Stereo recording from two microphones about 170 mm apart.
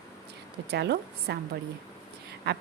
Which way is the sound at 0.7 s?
75° right (ahead or behind).